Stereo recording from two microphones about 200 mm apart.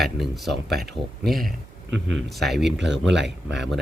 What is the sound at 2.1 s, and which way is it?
A man's voice, centre (ahead or behind).